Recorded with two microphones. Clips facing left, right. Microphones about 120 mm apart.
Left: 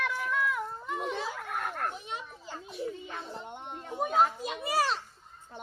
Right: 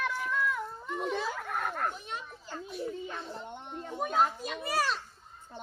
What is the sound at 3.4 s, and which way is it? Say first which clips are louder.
Children playing: even; 15° left (ahead or behind).